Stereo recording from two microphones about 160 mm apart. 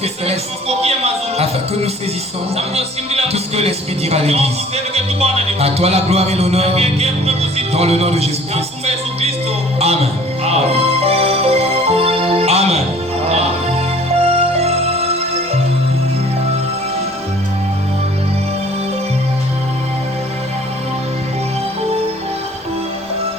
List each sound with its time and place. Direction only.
0.0 s a man's voice: 40° right (ahead or behind)
4.9 s music: 40° right (ahead or behind)
14.2 s music: 40° right (ahead or behind)